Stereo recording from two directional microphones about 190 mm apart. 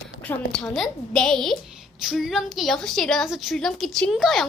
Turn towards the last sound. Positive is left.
turn(degrees=0)  # may be behind; listen again after turning